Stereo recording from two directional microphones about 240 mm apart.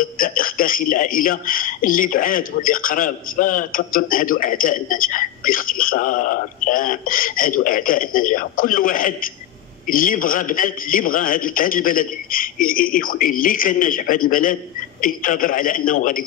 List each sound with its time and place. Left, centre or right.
0.0 s a man's voice: left